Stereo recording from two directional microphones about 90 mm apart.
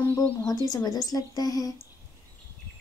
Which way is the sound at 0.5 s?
45° left (ahead or behind).